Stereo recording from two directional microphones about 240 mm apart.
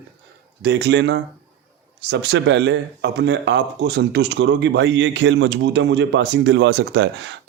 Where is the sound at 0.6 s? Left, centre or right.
Right.